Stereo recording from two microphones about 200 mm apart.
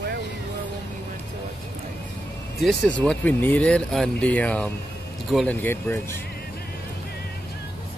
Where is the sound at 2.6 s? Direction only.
5° left (ahead or behind).